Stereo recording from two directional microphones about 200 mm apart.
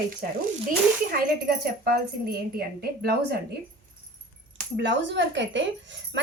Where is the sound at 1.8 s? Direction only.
50° right (ahead or behind).